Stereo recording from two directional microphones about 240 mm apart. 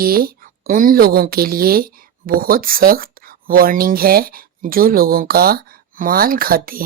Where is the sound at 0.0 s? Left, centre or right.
Right.